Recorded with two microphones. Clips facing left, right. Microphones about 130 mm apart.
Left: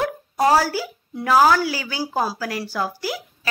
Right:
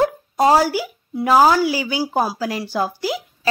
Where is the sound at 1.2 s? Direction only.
20° right (ahead or behind).